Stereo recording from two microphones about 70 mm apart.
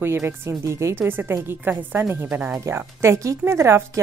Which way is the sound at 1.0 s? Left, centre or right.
Right.